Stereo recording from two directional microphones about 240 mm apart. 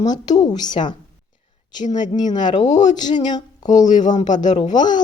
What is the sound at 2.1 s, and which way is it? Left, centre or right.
Speech, centre.